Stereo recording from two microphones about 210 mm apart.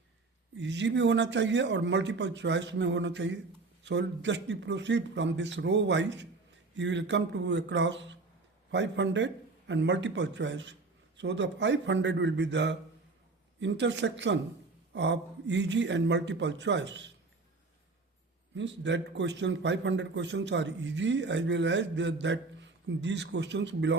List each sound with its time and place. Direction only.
0.5 s a man's voice: 60° right (ahead or behind)
18.5 s a man's voice: 60° right (ahead or behind)